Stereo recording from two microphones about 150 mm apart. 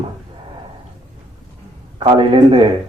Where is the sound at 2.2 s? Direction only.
35° right (ahead or behind).